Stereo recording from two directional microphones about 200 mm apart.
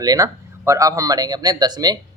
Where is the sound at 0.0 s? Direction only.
20° right (ahead or behind).